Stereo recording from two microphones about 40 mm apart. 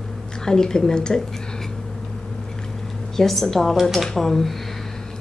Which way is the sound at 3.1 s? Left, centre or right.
Centre.